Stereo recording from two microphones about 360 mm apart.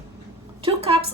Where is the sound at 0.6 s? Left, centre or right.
Centre.